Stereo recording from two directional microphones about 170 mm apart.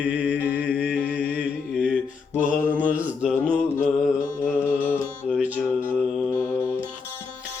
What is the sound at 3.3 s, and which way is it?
Mantra, 15° left (ahead or behind).